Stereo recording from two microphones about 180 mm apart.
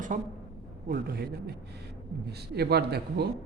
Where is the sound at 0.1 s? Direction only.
45° right (ahead or behind).